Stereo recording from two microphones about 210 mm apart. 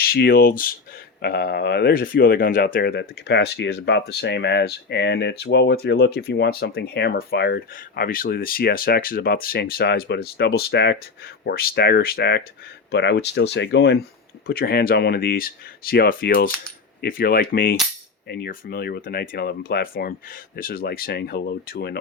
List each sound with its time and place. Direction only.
0.0 s speech: 45° left (ahead or behind)